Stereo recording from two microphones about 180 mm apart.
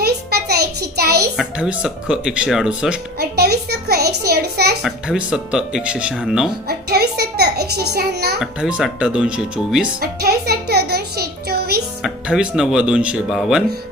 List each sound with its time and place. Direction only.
0.0 s a sound: 60° right (ahead or behind)
1.4 s speech: 5° right (ahead or behind)
3.2 s music: 60° right (ahead or behind)
4.3 s a sound: 60° right (ahead or behind)
4.8 s speech: 5° right (ahead or behind)
6.7 s a child's voice: 60° right (ahead or behind)
8.4 s speech: centre (ahead or behind)
10.0 s music: 60° right (ahead or behind)
12.0 s speech: 5° right (ahead or behind)